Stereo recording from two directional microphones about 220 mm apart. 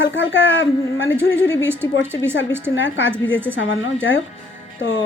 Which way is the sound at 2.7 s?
60° left (ahead or behind).